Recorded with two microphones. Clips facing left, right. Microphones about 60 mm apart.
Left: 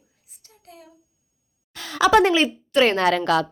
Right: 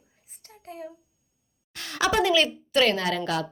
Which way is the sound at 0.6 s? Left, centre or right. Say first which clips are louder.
Right 7 dB; right.